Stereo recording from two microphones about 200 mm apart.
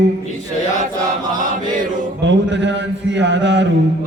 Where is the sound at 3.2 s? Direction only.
60° right (ahead or behind).